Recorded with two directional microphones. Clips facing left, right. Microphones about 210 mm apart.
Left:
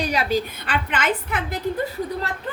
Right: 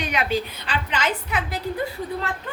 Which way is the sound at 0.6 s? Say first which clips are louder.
Left 2 dB; 55° left (ahead or behind).